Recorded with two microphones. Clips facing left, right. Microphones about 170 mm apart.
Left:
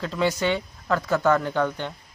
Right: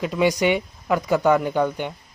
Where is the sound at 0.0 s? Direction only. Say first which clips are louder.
Right 4 dB; 15° right (ahead or behind).